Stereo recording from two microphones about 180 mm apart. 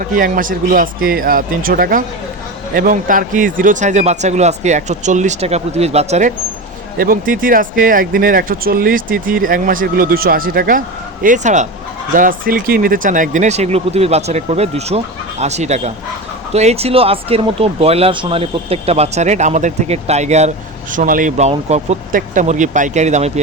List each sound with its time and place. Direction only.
0.2 s speech: 50° right (ahead or behind)
7.0 s speech: 50° right (ahead or behind)